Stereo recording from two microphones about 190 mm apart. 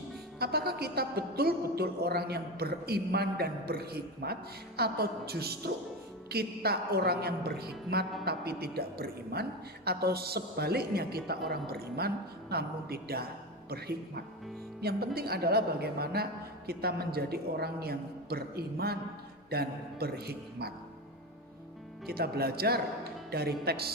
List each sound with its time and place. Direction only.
0.3 s a woman's voice: 55° right (ahead or behind)
22.0 s a woman's voice: 55° right (ahead or behind)